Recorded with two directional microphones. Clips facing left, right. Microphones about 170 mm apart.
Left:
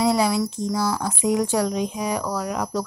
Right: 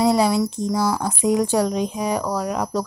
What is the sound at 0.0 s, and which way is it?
Speech, 35° right (ahead or behind).